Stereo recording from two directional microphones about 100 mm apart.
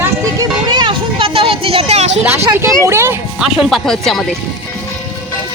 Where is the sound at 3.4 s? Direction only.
Centre (ahead or behind).